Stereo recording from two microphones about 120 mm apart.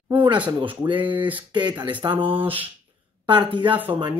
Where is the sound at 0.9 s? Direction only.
15° right (ahead or behind).